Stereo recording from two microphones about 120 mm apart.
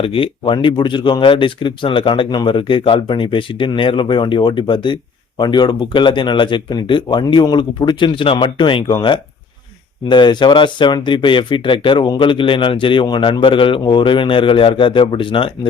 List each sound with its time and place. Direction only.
0.0 s speech: 50° left (ahead or behind)